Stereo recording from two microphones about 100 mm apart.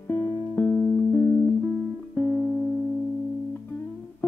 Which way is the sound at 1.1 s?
20° left (ahead or behind).